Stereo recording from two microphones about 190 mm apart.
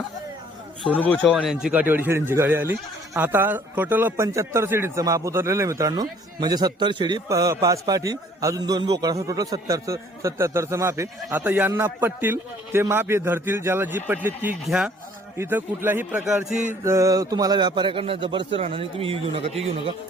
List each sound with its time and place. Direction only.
0.9 s a man's voice: 10° left (ahead or behind)
1.6 s speech: 10° right (ahead or behind)
16.8 s a man's voice: 15° right (ahead or behind); by 19.9 s 30° right (ahead or behind)